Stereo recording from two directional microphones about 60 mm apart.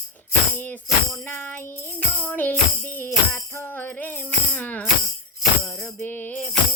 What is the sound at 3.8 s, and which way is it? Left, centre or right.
Music, left.